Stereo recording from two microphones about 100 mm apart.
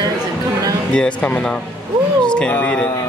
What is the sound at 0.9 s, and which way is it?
Speech, 15° left (ahead or behind).